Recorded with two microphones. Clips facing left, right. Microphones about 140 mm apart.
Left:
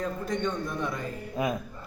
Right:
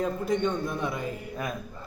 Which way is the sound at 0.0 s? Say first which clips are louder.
Right 3 dB; 10° right (ahead or behind).